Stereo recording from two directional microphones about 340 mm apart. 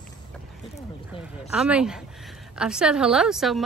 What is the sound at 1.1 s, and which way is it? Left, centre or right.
Speech, centre.